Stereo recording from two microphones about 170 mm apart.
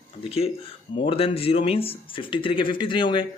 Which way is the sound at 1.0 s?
35° left (ahead or behind).